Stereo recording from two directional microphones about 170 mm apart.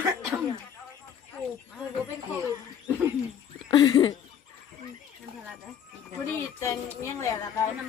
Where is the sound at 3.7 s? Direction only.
25° left (ahead or behind).